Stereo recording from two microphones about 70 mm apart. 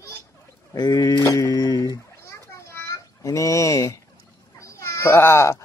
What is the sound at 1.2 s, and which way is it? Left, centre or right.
Music, left.